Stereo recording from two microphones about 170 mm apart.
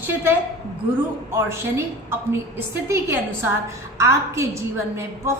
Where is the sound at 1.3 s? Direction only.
15° right (ahead or behind).